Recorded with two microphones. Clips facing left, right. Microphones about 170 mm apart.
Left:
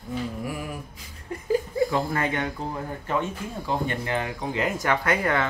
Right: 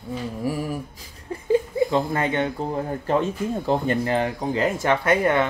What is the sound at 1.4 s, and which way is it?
Chuckle, 25° right (ahead or behind).